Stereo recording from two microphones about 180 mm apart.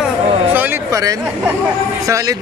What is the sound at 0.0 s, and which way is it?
Chatter, 10° right (ahead or behind).